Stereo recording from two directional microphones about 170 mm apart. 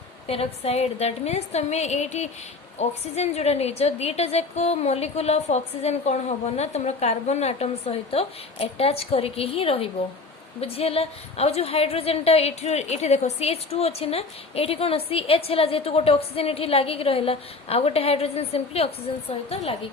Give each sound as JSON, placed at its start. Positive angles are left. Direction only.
{"t": 0.3, "sound": "a woman's voice", "side_deg": 35}